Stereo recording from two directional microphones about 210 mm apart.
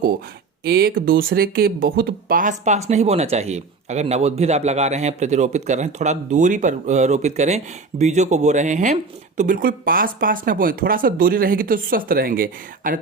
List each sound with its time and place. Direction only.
0.6 s speech: 45° right (ahead or behind)